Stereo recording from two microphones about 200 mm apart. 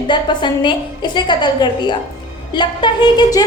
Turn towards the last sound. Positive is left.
turn(degrees=20)  # may be behind; listen again after turning